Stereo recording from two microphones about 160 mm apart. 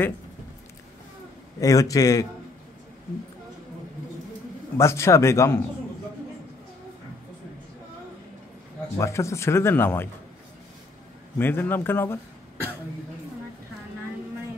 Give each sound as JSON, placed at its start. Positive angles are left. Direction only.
{"t": 1.6, "sound": "a man's voice", "side_deg": 20}
{"t": 4.7, "sound": "speech", "side_deg": 15}
{"t": 8.9, "sound": "speech", "side_deg": 20}
{"t": 11.3, "sound": "speech", "side_deg": 15}